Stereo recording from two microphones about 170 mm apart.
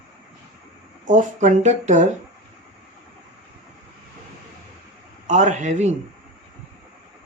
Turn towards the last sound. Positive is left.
turn(degrees=-45)  # may be behind; listen again after turning